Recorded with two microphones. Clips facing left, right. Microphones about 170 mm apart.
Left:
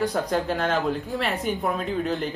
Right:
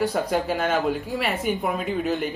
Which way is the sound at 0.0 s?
5° right (ahead or behind).